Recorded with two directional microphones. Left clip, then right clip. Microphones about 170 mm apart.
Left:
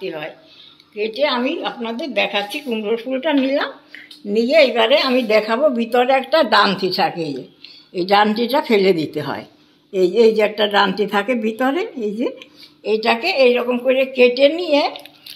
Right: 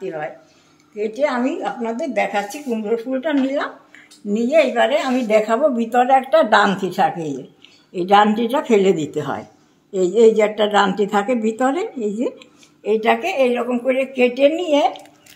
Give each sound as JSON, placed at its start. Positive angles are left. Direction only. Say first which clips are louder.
{"t": 0.0, "sound": "a woman's voice", "louder": "right 1 dB", "side_deg": -5}
{"t": 2.7, "sound": "speech", "louder": "even", "side_deg": 25}
{"t": 4.3, "sound": "speech", "louder": "left 2 dB", "side_deg": 40}
{"t": 5.3, "sound": "a woman's voice", "louder": "right 2 dB", "side_deg": 15}